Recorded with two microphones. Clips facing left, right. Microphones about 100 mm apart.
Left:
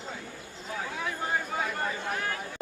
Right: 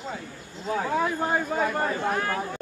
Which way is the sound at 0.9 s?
50° right (ahead or behind).